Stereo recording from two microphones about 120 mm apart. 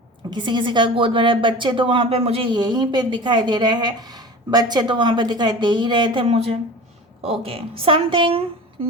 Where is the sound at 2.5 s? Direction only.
35° right (ahead or behind).